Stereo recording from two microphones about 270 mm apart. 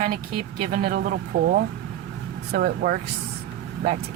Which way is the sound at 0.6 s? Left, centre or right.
Right.